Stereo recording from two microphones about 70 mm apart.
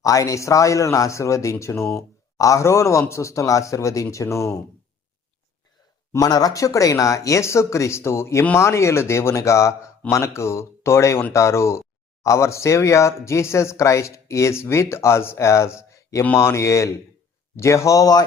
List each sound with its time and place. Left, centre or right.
0.0 s speech: left
6.1 s speech: left